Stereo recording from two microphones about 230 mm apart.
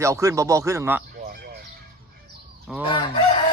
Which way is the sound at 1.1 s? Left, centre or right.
Right.